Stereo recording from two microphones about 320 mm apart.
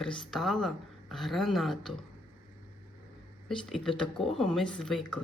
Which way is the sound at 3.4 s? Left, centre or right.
Centre.